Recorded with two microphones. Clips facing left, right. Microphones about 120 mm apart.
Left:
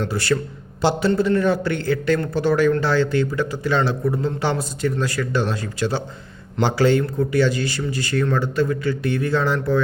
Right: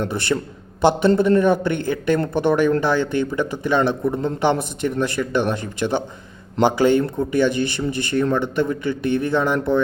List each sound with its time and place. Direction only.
0.0 s speech: 20° right (ahead or behind)